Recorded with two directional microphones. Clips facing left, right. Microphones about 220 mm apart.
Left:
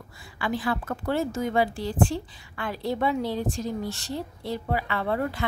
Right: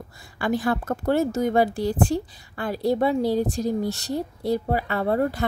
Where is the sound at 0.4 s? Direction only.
45° right (ahead or behind).